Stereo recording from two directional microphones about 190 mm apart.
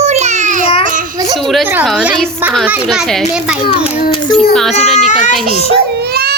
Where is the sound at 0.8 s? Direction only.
45° right (ahead or behind).